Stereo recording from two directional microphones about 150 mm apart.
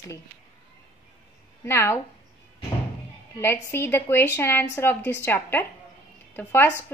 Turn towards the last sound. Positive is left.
turn(degrees=15)  # may be behind; listen again after turning